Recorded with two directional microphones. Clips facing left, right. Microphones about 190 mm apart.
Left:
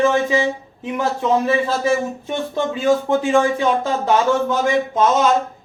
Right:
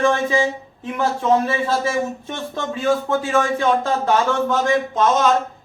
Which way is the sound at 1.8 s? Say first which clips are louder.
Left 3 dB; 10° left (ahead or behind).